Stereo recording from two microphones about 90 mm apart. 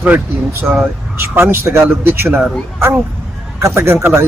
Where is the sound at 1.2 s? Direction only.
25° right (ahead or behind).